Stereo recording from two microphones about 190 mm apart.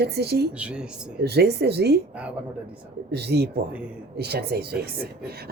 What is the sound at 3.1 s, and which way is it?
A woman's voice, 60° right (ahead or behind).